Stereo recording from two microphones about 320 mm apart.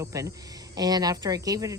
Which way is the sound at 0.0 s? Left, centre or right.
Centre.